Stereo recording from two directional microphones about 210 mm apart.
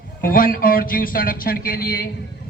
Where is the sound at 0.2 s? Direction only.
45° left (ahead or behind).